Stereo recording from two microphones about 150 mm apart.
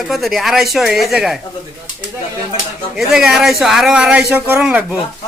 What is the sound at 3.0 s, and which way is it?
Speech, 5° right (ahead or behind).